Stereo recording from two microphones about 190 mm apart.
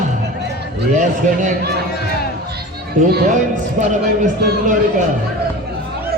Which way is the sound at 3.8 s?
40° right (ahead or behind).